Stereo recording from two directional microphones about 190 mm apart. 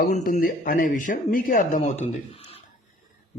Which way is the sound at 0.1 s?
45° left (ahead or behind).